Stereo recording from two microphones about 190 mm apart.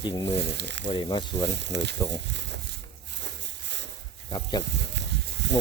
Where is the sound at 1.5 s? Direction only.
65° right (ahead or behind).